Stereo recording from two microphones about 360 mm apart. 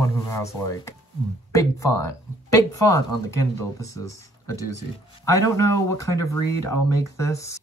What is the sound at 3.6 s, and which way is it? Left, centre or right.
Speech, centre.